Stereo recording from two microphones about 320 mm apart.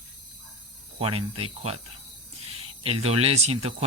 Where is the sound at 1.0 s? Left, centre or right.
Centre.